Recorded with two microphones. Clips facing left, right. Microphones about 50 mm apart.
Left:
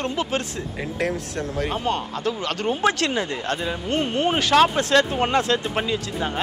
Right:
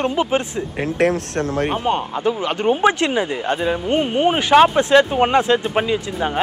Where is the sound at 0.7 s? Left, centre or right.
Right.